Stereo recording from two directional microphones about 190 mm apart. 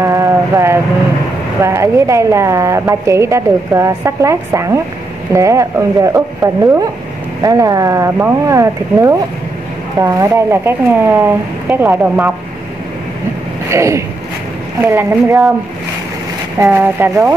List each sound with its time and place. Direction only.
0.0 s a sound: 15° right (ahead or behind)
1.6 s a woman's voice: 15° right (ahead or behind)
13.7 s vehicle: 15° right (ahead or behind)
14.8 s a woman's voice: 10° right (ahead or behind)
16.5 s a woman's voice: 15° right (ahead or behind)